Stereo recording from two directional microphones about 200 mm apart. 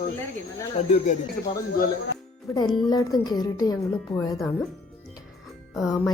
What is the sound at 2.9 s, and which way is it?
Speech, 20° left (ahead or behind).